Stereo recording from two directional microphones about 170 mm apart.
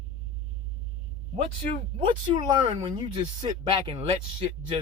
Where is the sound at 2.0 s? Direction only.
30° right (ahead or behind).